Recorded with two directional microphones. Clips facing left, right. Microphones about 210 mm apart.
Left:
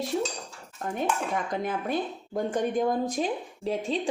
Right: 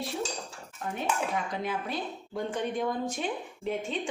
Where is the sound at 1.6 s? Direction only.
45° left (ahead or behind).